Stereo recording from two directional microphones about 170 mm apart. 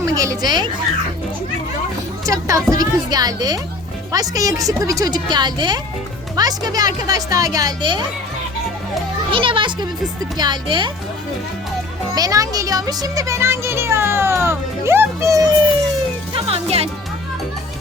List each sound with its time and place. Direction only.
0.0 s speech: 20° right (ahead or behind)
2.2 s a woman's voice: 20° right (ahead or behind)
9.3 s a woman's voice: 30° right (ahead or behind)
12.1 s speech: 20° right (ahead or behind)
16.3 s speech: 35° right (ahead or behind)